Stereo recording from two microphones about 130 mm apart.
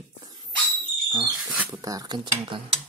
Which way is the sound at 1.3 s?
10° right (ahead or behind).